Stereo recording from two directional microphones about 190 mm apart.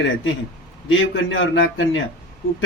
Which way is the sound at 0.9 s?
85° left.